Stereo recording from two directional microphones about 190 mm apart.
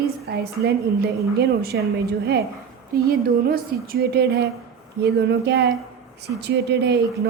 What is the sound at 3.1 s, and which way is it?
Speech, 50° right (ahead or behind).